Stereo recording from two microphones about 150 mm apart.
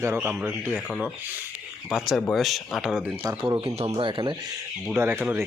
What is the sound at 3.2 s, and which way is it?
Speech, 30° right (ahead or behind).